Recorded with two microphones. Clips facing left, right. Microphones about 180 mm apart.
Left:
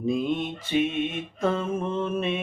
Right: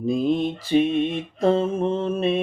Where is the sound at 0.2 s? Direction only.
35° right (ahead or behind).